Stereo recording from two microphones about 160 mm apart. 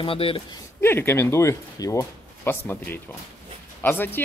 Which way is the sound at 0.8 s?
15° left (ahead or behind).